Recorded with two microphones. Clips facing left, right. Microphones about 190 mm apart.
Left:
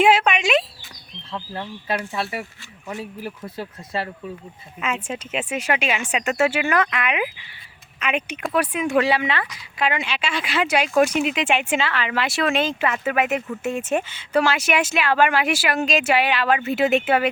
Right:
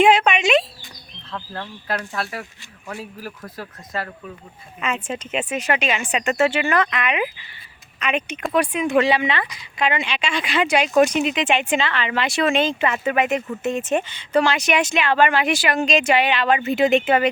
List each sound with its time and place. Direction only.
0.0 s a sound: 5° left (ahead or behind)
1.3 s a woman's voice: 10° left (ahead or behind)
4.8 s a woman's voice: 5° left (ahead or behind)